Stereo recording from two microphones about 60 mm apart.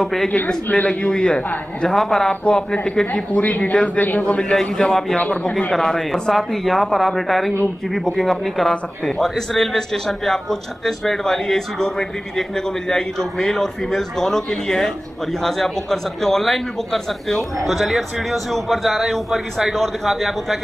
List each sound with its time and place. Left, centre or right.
0.0 s a man's voice: centre
0.7 s a man's voice: left
2.4 s a man's voice: centre
4.2 s a man's voice: centre
5.1 s speech: left
5.7 s a man's voice: centre